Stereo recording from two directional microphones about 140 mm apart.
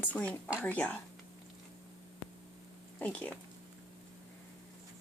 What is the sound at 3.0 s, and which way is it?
Speech, 10° left (ahead or behind).